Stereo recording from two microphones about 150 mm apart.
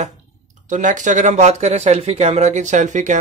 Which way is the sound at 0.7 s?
55° right (ahead or behind).